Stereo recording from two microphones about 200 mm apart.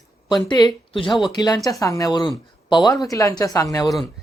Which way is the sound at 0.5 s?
20° left (ahead or behind).